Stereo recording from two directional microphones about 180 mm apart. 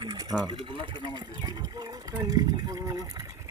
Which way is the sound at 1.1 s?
20° right (ahead or behind).